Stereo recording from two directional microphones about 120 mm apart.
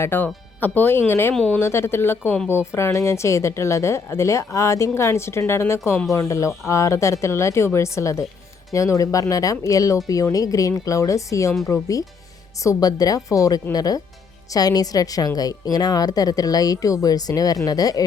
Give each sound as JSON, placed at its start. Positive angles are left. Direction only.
{"t": 0.0, "sound": "speech", "side_deg": 20}